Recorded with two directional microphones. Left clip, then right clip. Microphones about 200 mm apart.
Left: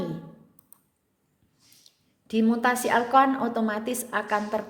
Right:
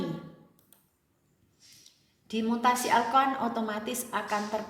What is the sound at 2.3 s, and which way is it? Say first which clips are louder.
A woman's voice: left 3 dB; 55° left (ahead or behind).